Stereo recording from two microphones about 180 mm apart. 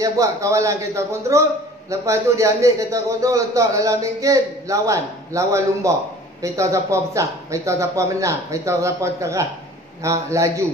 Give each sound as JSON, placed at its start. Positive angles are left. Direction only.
{"t": 0.0, "sound": "a man's voice", "side_deg": -15}